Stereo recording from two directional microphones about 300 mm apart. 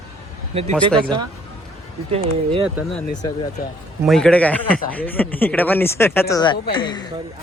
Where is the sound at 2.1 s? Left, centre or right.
Centre.